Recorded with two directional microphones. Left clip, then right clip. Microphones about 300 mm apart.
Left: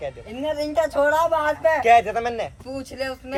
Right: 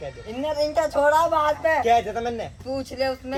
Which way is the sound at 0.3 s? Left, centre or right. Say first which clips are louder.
Even; centre.